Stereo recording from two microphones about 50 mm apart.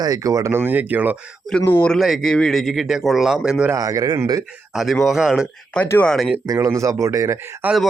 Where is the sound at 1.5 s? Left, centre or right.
Centre.